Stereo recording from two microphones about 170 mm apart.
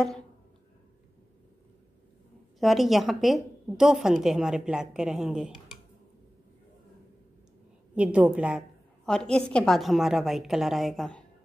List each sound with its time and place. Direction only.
2.6 s a woman's voice: centre (ahead or behind)
7.9 s a woman's voice: 10° right (ahead or behind)
9.0 s a woman's voice: 5° left (ahead or behind)